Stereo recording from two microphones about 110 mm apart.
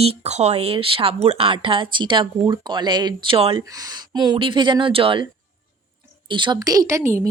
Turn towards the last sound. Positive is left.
turn(degrees=-25)  # may be behind; listen again after turning